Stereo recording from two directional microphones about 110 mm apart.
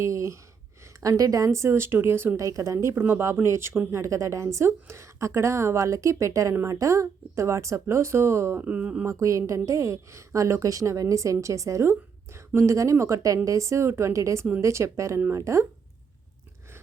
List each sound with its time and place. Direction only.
0.0 s sigh: 25° right (ahead or behind)
1.0 s a woman's voice: 30° right (ahead or behind)
8.6 s speech: 10° right (ahead or behind)
9.0 s a woman's voice: 30° right (ahead or behind)